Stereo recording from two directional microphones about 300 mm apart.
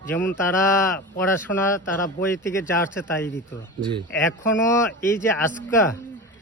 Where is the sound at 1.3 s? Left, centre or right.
Centre.